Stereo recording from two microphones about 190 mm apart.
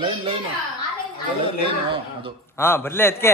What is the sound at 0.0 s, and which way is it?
Speech, 25° right (ahead or behind).